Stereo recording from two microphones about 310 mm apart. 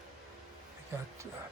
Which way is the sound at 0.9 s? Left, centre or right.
Centre.